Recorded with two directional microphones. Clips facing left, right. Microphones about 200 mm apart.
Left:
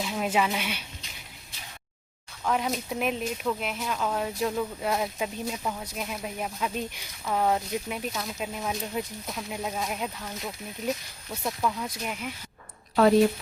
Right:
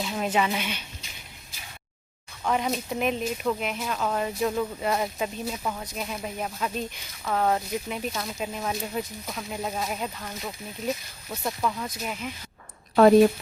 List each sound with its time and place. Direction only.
0.0 s speech: 5° left (ahead or behind)
2.4 s speech: centre (ahead or behind)